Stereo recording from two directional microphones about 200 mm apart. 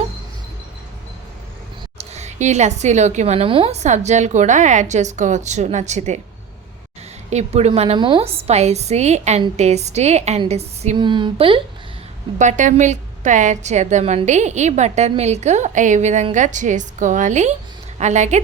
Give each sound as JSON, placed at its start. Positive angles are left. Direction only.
{"t": 2.0, "sound": "a woman's voice", "side_deg": -35}
{"t": 7.3, "sound": "a woman's voice", "side_deg": -35}
{"t": 12.4, "sound": "a woman's voice", "side_deg": -40}